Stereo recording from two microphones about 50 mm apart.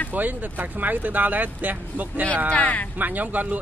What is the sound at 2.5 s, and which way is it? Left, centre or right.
Speech, left.